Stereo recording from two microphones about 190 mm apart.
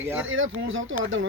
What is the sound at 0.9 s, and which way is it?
Speech, 90° right.